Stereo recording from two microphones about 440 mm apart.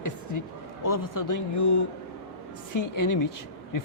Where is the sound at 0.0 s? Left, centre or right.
Left.